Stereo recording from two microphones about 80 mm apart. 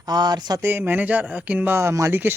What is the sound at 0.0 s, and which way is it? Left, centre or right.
Speech, right.